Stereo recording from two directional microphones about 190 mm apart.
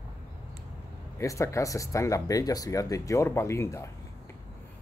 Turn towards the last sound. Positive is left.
turn(degrees=15)  # may be behind; listen again after turning